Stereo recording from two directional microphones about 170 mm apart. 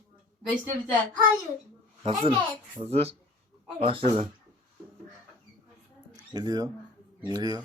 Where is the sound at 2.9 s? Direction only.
35° right (ahead or behind).